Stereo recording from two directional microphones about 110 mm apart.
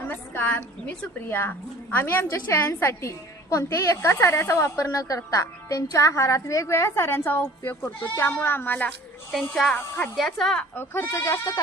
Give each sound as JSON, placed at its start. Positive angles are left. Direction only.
{"t": 0.1, "sound": "a woman's voice", "side_deg": 15}
{"t": 10.2, "sound": "a woman's voice", "side_deg": 0}
{"t": 10.8, "sound": "a woman's voice", "side_deg": 20}